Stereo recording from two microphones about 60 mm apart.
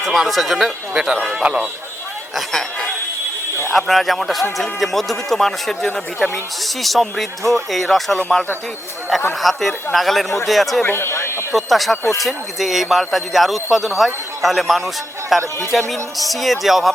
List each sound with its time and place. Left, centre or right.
0.0 s a man's voice: centre
1.5 s speech: right
2.3 s speech: centre
9.4 s speech: centre
10.8 s speech: left
11.5 s speech: centre